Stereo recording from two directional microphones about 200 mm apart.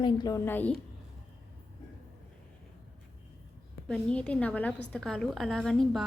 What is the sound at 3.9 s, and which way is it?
A woman's voice, 5° left (ahead or behind).